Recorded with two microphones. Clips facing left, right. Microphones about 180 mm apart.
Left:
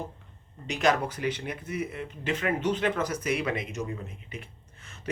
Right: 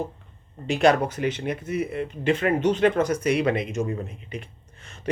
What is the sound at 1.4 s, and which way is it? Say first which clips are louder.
Speech: right 6 dB; 25° right (ahead or behind).